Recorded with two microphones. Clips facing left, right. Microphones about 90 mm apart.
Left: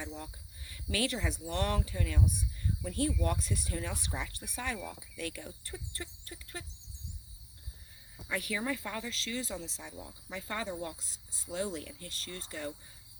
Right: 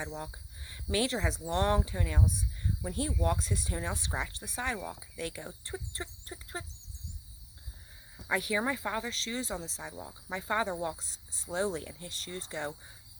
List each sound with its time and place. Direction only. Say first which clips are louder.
0.7 s speech: right 3 dB; 25° right (ahead or behind)
8.4 s speech: right 3 dB; 25° right (ahead or behind)